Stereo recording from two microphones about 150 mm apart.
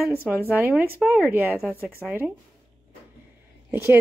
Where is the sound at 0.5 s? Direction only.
10° right (ahead or behind).